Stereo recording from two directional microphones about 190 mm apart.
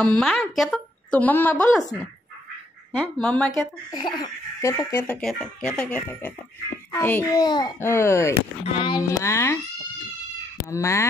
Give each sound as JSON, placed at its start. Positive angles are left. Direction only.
{"t": 0.0, "sound": "speech", "side_deg": 5}
{"t": 3.0, "sound": "speech", "side_deg": 5}
{"t": 3.9, "sound": "speech", "side_deg": 20}
{"t": 8.6, "sound": "speech", "side_deg": 25}
{"t": 10.7, "sound": "speech", "side_deg": 15}